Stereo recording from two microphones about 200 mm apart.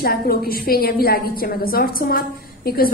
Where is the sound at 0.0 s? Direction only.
50° left (ahead or behind).